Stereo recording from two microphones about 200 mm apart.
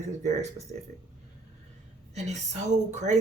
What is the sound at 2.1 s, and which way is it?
Speech, 35° right (ahead or behind).